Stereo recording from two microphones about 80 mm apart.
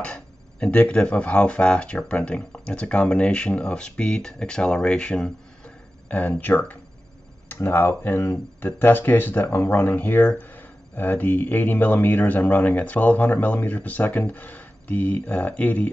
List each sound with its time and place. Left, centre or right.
0.0 s speech: centre